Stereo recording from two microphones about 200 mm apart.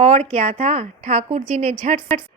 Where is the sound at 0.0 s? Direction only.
35° right (ahead or behind).